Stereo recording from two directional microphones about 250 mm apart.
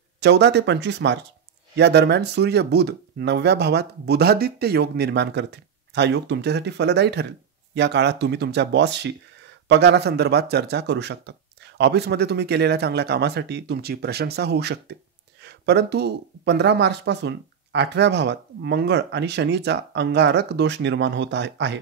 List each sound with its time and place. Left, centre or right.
0.2 s speech: right